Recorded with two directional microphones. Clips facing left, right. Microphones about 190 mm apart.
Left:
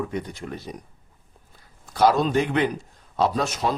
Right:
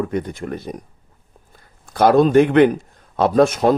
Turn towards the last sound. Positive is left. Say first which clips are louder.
# right 11 dB
turn(degrees=-50)  # may be behind; listen again after turning